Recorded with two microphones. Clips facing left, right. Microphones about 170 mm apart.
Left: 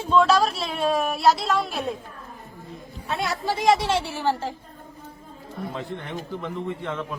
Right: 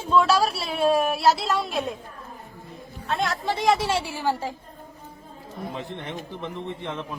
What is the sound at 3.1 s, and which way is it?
Speech, 5° left (ahead or behind).